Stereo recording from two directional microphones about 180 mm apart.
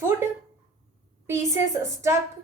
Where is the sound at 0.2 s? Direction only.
15° right (ahead or behind).